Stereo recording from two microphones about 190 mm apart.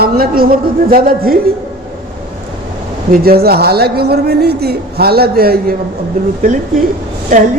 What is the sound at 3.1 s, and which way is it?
A man's voice, 50° right (ahead or behind).